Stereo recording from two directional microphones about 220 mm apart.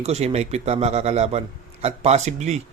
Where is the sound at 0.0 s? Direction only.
30° right (ahead or behind).